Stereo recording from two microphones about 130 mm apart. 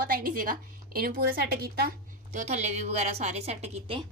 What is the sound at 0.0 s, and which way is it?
Speech, 90° right.